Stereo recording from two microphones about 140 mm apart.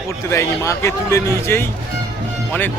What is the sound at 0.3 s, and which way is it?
A man's voice, 20° left (ahead or behind).